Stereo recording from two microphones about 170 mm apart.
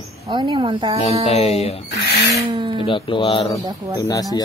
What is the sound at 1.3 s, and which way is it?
Speech, 35° left (ahead or behind).